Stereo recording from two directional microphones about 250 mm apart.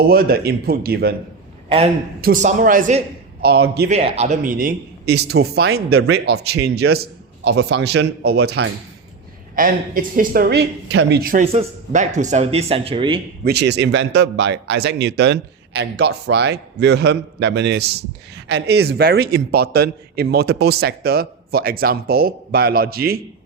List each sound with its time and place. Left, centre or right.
0.1 s a man's voice: right
2.2 s a man's voice: right
3.9 s a man's voice: right
6.9 s a sound: right
7.9 s a man's voice: right; by 13.2 s centre
13.4 s a man's voice: right